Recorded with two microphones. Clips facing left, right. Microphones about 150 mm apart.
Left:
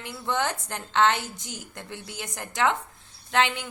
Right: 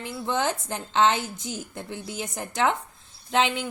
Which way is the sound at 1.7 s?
15° right (ahead or behind).